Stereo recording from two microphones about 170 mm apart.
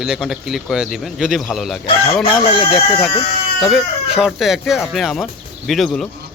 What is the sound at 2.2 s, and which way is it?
Speech, 30° left (ahead or behind).